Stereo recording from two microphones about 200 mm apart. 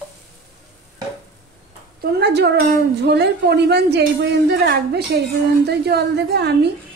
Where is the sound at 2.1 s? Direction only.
55° right (ahead or behind).